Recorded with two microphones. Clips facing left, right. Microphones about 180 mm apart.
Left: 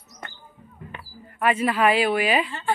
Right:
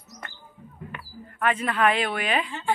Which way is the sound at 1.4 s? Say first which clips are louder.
Left 3 dB; 10° left (ahead or behind).